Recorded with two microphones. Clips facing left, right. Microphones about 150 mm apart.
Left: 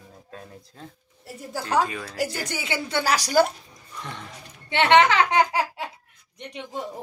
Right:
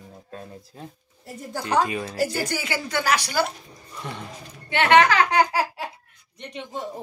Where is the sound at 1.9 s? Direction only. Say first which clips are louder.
Right 5 dB; 15° right (ahead or behind).